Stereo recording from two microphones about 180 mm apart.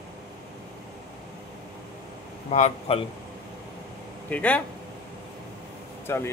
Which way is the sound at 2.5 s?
40° left (ahead or behind).